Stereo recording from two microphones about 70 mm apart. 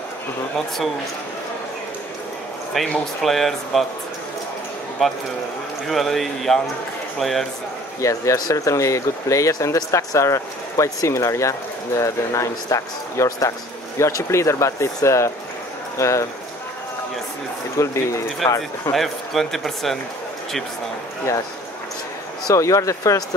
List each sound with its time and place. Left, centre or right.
2.9 s speech: centre
5.0 s speech: centre
8.0 s speech: left
17.7 s speech: left
18.9 s speech: centre
22.5 s speech: left